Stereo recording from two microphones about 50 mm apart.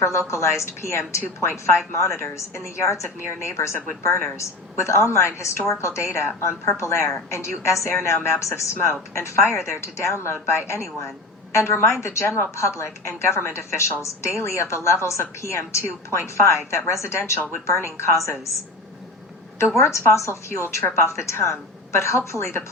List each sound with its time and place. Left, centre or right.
0.0 s a woman's voice: left
3.4 s a woman's voice: left
7.9 s a woman's voice: left
11.5 s a woman's voice: left
18.3 s a woman's voice: left
19.7 s a woman's voice: left